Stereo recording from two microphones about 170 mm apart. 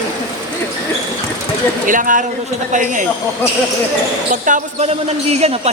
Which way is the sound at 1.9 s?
50° right (ahead or behind).